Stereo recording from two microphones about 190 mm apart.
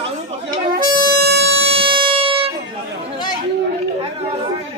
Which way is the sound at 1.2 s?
60° right (ahead or behind).